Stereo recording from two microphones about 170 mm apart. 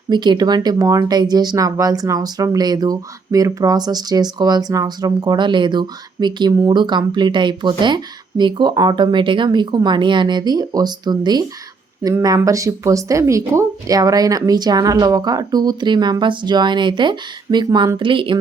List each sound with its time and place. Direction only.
0.1 s speech: 25° right (ahead or behind)